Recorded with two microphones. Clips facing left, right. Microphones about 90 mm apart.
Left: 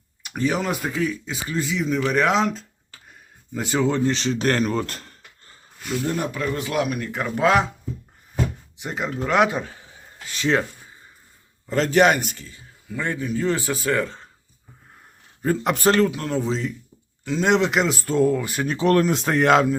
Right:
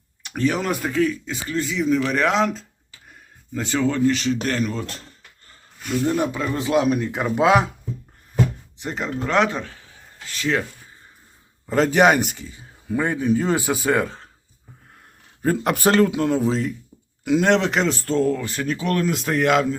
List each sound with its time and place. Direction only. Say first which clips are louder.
0.3 s speech: right 1 dB; 10° left (ahead or behind)
3.5 s speech: even; 15° left (ahead or behind)
4.0 s speech: right 3 dB; 30° left (ahead or behind)
4.4 s speech: left 3 dB; 45° left (ahead or behind)
6.1 s a man's voice: right 5 dB; 15° right (ahead or behind)
6.6 s a man's voice: right 8 dB; 25° right (ahead or behind)
8.8 s speech: even; 5° left (ahead or behind); by 10.7 s 30° left (ahead or behind)
11.6 s a man's voice: right 1 dB; 10° right (ahead or behind)
15.4 s a man's voice: right 1 dB; 5° right (ahead or behind)
16.1 s a man's voice: right 5 dB; 15° right (ahead or behind)
16.4 s speech: right 3 dB; 5° right (ahead or behind); by 18.7 s 15° left (ahead or behind)
18.7 s speech: left 4 dB; 35° left (ahead or behind)